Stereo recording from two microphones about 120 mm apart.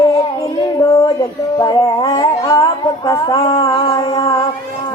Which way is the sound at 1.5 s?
30° left (ahead or behind).